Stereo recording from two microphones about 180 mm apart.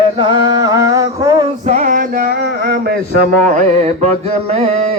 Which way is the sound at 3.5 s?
40° right (ahead or behind).